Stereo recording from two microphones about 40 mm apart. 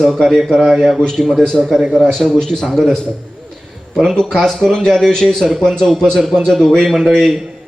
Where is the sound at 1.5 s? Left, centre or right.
Centre.